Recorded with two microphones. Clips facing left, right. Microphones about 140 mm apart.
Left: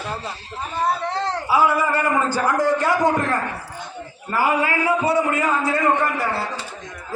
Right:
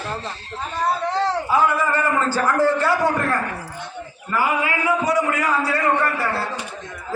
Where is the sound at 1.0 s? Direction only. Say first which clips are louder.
Right 3 dB; centre (ahead or behind); by 3.3 s 15° left (ahead or behind).